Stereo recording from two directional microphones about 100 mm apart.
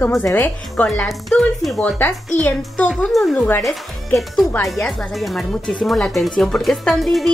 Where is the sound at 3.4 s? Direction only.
20° left (ahead or behind).